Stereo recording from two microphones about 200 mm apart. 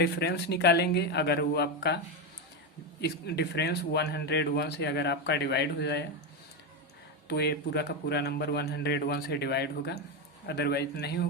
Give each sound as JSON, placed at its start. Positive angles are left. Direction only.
{"t": 0.0, "sound": "a man's voice", "side_deg": 55}
{"t": 3.0, "sound": "a man's voice", "side_deg": 55}
{"t": 7.3, "sound": "a man's voice", "side_deg": 55}